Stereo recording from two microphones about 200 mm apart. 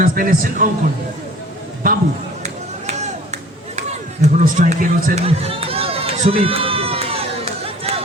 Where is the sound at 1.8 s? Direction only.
45° right (ahead or behind).